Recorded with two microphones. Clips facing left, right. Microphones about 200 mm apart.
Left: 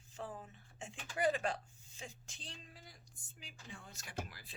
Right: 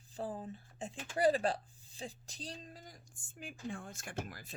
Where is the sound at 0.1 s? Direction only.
35° right (ahead or behind).